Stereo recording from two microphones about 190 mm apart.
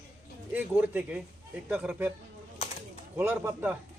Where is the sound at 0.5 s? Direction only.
10° right (ahead or behind).